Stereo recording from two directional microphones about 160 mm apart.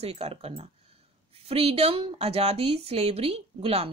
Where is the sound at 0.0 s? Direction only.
40° right (ahead or behind).